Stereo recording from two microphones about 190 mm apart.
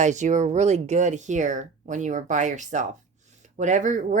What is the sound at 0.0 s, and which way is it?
Speech, 40° right (ahead or behind).